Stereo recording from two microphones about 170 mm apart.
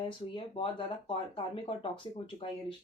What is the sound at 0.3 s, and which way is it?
Speech, 30° left (ahead or behind).